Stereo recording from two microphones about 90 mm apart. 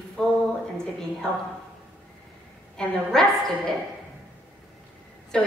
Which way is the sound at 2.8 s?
5° left (ahead or behind).